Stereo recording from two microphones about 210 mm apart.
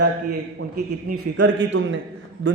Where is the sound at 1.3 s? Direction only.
60° right (ahead or behind).